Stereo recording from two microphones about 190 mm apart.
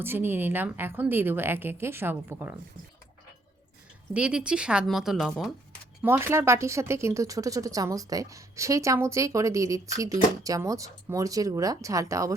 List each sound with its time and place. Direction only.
0.0 s speech: 10° right (ahead or behind)
4.1 s speech: 5° right (ahead or behind)
6.0 s speech: 10° right (ahead or behind)